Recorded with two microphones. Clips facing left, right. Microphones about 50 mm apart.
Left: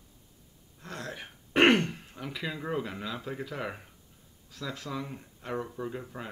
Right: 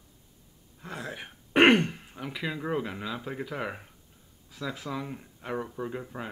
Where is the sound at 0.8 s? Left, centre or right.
Centre.